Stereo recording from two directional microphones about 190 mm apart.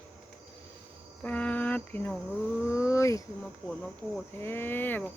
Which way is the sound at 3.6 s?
Centre (ahead or behind).